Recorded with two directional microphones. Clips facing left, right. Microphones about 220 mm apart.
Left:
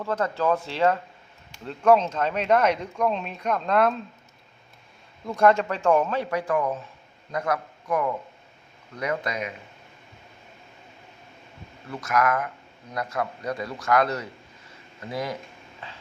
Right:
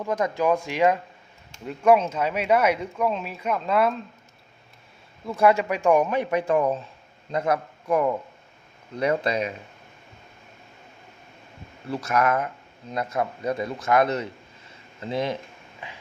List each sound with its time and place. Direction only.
0.0 s speech: 15° right (ahead or behind)
5.2 s a man's voice: 5° right (ahead or behind); by 9.5 s 30° right (ahead or behind)
11.9 s a man's voice: 30° right (ahead or behind)
15.8 s a sound: 15° right (ahead or behind)